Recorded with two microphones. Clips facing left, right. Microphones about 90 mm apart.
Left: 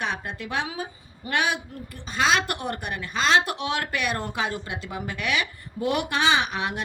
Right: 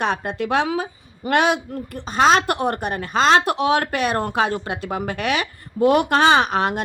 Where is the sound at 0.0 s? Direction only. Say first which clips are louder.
Right 8 dB; 55° right (ahead or behind).